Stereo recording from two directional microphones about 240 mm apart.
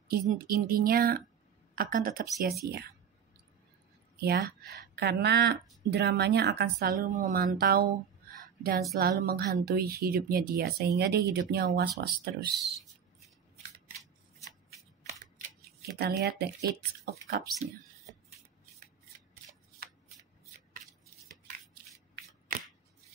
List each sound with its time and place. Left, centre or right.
0.1 s a woman's voice: right
4.2 s a woman's voice: right
16.0 s a woman's voice: right